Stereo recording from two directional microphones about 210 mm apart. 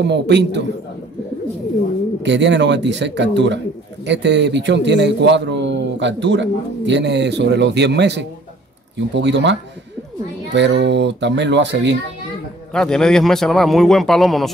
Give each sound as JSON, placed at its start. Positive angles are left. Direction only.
{"t": 0.0, "sound": "a man's voice", "side_deg": -55}
{"t": 2.2, "sound": "a man's voice", "side_deg": -60}
{"t": 12.7, "sound": "a man's voice", "side_deg": 5}